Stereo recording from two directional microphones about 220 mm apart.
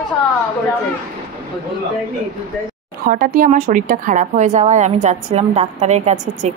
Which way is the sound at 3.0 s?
40° right (ahead or behind).